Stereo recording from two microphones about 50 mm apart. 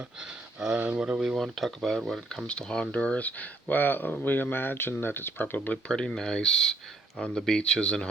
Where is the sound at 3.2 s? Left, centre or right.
Left.